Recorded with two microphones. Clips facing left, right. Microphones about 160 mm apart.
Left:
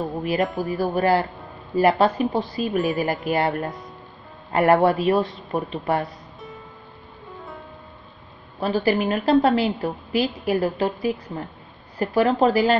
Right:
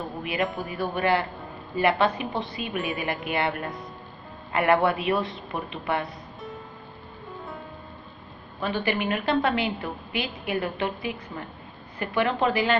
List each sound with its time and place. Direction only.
0.2 s a woman's voice: 40° left (ahead or behind)
8.5 s a woman's voice: 35° left (ahead or behind)